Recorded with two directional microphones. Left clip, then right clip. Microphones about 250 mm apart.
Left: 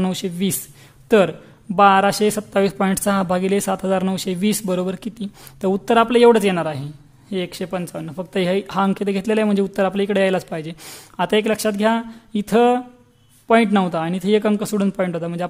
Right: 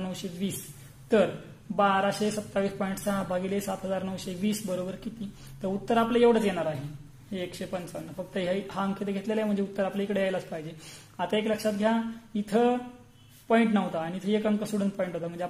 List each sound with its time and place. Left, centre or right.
0.0 s speech: left